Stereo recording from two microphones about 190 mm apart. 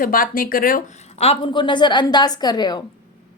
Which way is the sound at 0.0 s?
50° left (ahead or behind).